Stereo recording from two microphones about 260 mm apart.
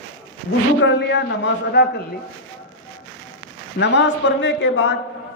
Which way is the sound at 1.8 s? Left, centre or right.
Left.